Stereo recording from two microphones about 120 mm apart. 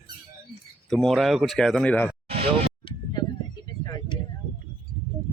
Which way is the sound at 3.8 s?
35° left (ahead or behind).